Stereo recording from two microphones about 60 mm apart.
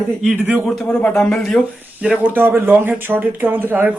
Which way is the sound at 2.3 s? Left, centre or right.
Right.